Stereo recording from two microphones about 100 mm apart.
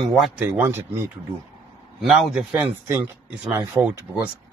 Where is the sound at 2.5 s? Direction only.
20° right (ahead or behind).